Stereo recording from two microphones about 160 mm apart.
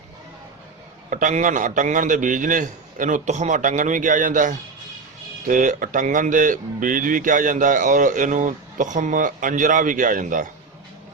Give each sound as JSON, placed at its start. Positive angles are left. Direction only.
{"t": 1.1, "sound": "a man's voice", "side_deg": -50}